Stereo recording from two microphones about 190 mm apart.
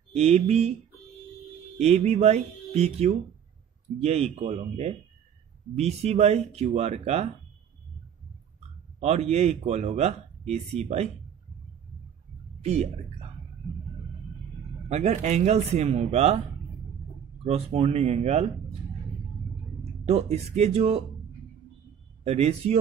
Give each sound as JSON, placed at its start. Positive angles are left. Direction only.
{"t": 0.1, "sound": "speech", "side_deg": -35}
{"t": 1.8, "sound": "speech", "side_deg": -35}
{"t": 9.0, "sound": "speech", "side_deg": -35}
{"t": 12.6, "sound": "speech", "side_deg": -35}
{"t": 14.9, "sound": "speech", "side_deg": -35}
{"t": 17.5, "sound": "speech", "side_deg": -35}
{"t": 19.8, "sound": "speech", "side_deg": -35}
{"t": 22.2, "sound": "speech", "side_deg": -35}